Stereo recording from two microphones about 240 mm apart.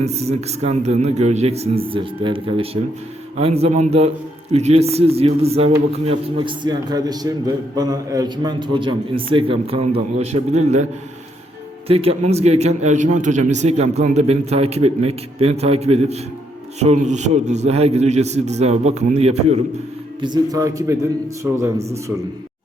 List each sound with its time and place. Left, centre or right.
0.0 s a man's voice: right
11.9 s a man's voice: right
20.2 s a man's voice: centre